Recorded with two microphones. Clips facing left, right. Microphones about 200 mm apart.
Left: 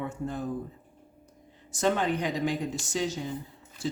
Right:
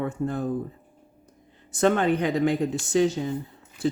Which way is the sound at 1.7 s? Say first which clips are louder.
Right 5 dB; 60° right (ahead or behind).